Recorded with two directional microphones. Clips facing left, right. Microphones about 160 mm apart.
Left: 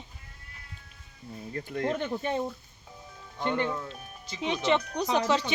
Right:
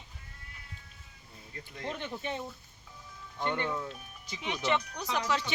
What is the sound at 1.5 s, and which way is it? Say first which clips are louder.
Speech: left 9 dB; 55° left (ahead or behind).